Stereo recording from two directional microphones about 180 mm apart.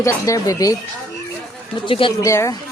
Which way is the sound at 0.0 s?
20° left (ahead or behind).